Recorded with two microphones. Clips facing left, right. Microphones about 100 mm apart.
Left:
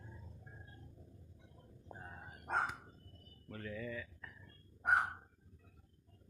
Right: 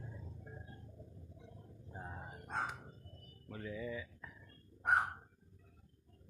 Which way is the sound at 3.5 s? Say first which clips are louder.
Right 1 dB; 10° right (ahead or behind).